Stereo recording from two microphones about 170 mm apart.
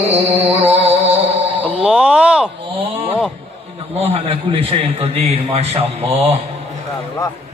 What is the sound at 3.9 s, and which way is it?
A man's voice, 35° right (ahead or behind).